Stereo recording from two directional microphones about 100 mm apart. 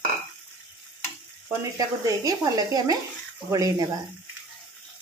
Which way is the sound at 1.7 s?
40° right (ahead or behind).